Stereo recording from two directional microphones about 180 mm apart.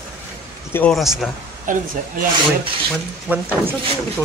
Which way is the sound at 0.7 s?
5° left (ahead or behind).